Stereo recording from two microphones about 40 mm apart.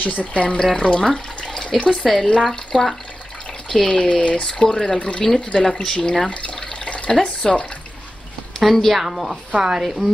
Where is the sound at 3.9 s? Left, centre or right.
Left.